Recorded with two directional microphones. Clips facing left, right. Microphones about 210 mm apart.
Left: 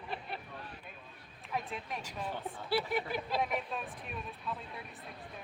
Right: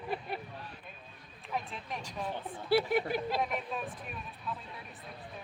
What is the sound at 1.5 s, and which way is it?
A woman's voice, centre (ahead or behind).